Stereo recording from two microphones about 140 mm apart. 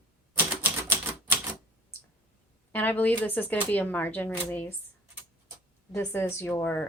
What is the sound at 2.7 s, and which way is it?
A woman's voice, 10° left (ahead or behind).